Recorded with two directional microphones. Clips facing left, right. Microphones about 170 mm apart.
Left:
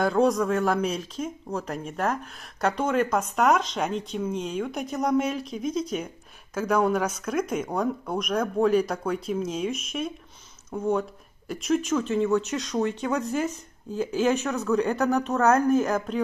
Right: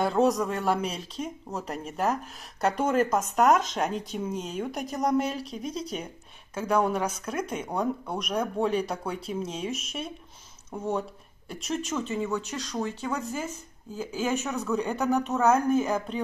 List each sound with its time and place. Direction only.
0.0 s speech: centre (ahead or behind)
5.2 s speech: 35° right (ahead or behind)
6.7 s speech: centre (ahead or behind)